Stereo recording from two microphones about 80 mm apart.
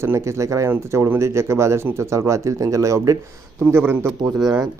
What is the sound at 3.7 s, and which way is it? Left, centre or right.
Speech, right.